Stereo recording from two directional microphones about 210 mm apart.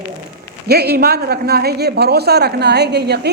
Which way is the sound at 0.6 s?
50° right (ahead or behind).